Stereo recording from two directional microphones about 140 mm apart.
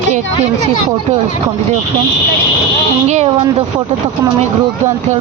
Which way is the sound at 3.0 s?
50° right (ahead or behind).